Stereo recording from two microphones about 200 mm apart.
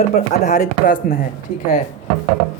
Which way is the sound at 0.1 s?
40° left (ahead or behind).